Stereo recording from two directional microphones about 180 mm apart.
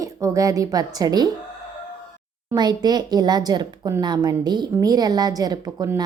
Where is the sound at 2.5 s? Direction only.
25° right (ahead or behind).